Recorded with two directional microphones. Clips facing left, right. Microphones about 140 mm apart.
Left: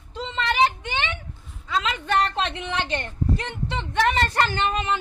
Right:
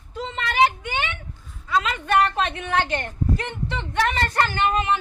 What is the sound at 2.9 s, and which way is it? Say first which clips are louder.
A man's voice: right 1 dB; 20° left (ahead or behind).